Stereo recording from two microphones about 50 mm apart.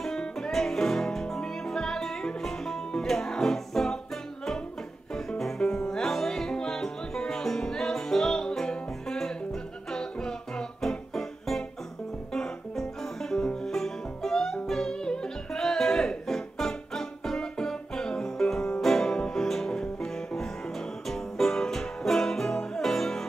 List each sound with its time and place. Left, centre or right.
0.0 s music: centre
5.4 s music: centre